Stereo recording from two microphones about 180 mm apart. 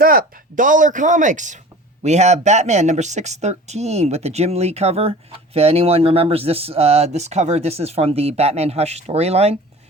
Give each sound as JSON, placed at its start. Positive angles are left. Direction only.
{"t": 0.0, "sound": "speech", "side_deg": -55}